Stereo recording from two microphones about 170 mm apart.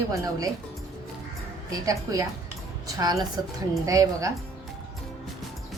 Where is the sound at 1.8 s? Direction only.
20° right (ahead or behind).